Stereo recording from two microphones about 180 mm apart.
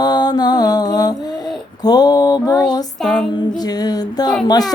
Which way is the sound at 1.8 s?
20° left (ahead or behind).